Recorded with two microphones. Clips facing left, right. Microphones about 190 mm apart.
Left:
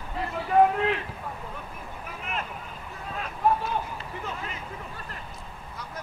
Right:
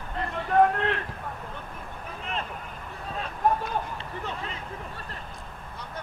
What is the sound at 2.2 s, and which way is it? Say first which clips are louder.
Vehicle: right 1 dB; 30° right (ahead or behind).